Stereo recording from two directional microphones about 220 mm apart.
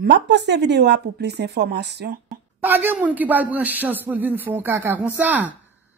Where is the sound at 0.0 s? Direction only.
50° right (ahead or behind).